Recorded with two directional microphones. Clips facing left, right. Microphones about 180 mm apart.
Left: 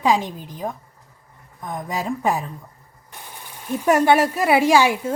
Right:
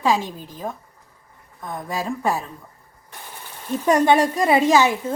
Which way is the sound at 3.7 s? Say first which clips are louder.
Even; 10° left (ahead or behind).